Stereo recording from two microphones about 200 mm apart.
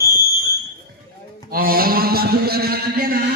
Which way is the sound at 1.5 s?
50° right (ahead or behind).